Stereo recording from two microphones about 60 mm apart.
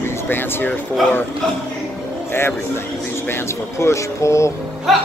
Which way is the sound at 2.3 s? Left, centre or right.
Left.